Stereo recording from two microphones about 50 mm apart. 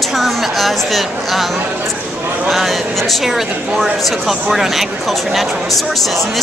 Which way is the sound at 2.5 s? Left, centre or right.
Centre.